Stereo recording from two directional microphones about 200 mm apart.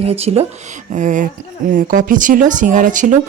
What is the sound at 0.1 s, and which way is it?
Speech, 30° right (ahead or behind).